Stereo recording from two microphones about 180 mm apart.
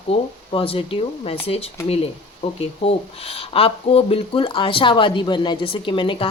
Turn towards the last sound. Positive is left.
turn(degrees=30)  # may be behind; listen again after turning